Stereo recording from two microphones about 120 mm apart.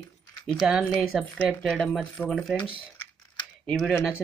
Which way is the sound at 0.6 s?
5° right (ahead or behind).